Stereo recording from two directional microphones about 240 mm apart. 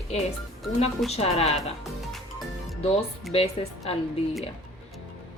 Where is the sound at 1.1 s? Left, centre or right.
Left.